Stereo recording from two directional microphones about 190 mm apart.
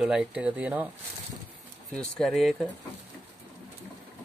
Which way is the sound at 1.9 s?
Centre (ahead or behind).